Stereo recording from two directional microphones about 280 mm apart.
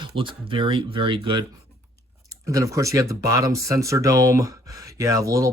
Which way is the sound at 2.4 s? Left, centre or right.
Centre.